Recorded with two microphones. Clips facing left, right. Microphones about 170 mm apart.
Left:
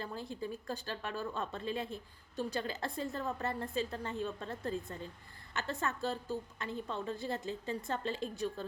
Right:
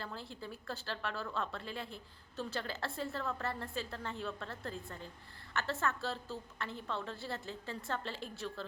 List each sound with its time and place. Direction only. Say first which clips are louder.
0.0 s speech: left 5 dB; 15° left (ahead or behind)